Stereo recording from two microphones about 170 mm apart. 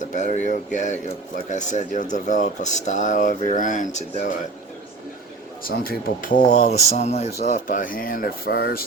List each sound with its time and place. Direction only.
0.0 s speech: 45° left (ahead or behind)
5.6 s speech: 60° left (ahead or behind)
6.5 s speech: 45° left (ahead or behind); by 8.8 s 65° left (ahead or behind)